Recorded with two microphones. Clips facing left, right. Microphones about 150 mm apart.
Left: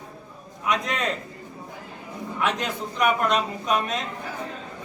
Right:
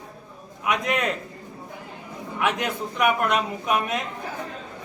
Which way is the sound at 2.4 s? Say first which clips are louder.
Right 1 dB; 10° right (ahead or behind).